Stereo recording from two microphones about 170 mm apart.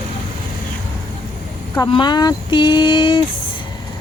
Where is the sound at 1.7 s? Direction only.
25° left (ahead or behind).